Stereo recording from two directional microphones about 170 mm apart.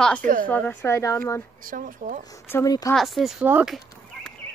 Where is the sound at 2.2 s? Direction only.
15° left (ahead or behind).